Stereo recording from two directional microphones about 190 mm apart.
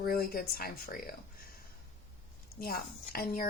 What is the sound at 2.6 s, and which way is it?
Speech, 50° left (ahead or behind).